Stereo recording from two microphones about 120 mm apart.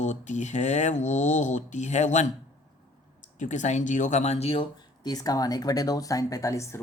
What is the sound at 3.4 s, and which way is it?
Speech, 85° left.